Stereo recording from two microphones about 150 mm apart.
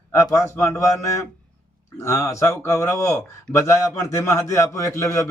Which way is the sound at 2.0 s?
20° left (ahead or behind).